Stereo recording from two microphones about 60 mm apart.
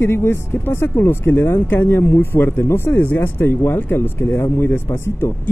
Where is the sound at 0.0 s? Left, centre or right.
Left.